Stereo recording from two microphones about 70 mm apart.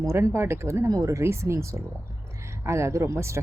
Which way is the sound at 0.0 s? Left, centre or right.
Right.